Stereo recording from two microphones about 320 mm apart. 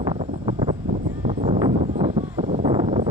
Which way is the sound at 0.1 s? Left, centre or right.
Centre.